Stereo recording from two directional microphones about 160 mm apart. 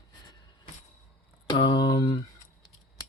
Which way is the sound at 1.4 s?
30° left (ahead or behind).